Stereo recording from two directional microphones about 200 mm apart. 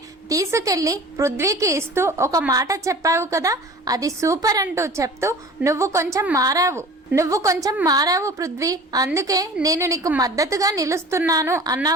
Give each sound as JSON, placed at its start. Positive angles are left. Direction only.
{"t": 0.3, "sound": "a woman's voice", "side_deg": -15}